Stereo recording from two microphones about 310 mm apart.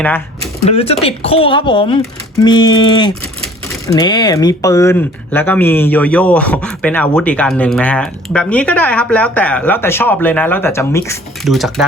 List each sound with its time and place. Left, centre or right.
0.6 s speech: centre